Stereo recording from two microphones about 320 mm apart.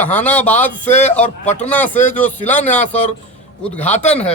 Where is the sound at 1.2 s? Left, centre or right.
Left.